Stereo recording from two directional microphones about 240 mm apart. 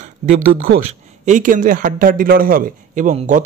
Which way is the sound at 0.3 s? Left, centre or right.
Right.